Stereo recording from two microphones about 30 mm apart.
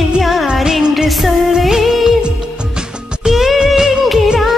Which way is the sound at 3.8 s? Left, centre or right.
Centre.